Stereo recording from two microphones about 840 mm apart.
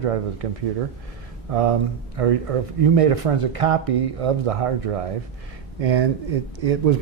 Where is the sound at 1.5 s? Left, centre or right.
Right.